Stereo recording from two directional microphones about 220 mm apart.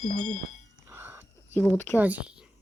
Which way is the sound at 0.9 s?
10° right (ahead or behind).